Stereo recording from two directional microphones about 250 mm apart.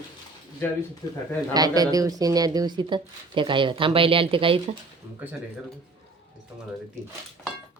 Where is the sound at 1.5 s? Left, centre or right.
Centre.